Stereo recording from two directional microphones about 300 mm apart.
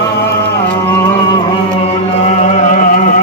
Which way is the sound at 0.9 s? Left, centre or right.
Centre.